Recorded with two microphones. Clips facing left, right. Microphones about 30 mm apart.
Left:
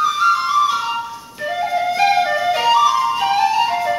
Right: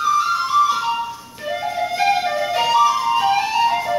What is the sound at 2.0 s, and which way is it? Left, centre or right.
Flute, centre.